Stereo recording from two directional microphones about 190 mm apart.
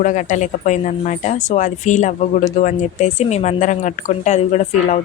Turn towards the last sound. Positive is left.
turn(degrees=35)  # may be behind; listen again after turning